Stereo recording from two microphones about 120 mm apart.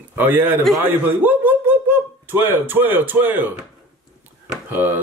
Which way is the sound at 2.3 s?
15° right (ahead or behind).